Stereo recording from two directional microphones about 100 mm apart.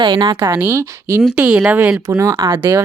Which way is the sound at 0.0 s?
50° right (ahead or behind).